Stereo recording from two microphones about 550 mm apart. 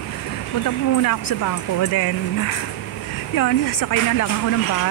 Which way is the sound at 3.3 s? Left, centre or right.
Left.